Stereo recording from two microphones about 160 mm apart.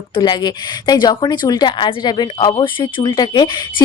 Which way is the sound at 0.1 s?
30° left (ahead or behind).